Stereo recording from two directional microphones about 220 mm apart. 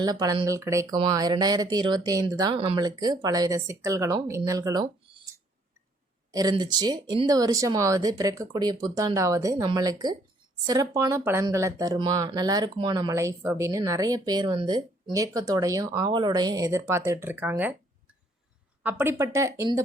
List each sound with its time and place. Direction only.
0.0 s speech: 15° right (ahead or behind)
6.3 s speech: 20° right (ahead or behind)
18.8 s speech: 10° right (ahead or behind)